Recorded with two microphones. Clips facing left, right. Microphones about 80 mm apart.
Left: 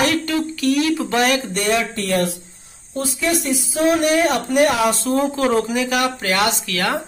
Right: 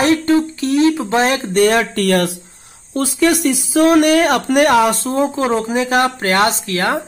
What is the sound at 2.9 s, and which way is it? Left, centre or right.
Speech, right.